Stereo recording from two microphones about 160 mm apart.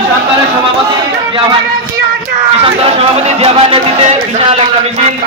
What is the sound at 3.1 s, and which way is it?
Speech, 40° right (ahead or behind).